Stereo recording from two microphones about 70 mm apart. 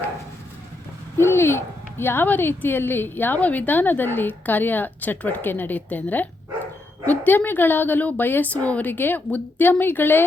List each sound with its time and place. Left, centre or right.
1.2 s speech: left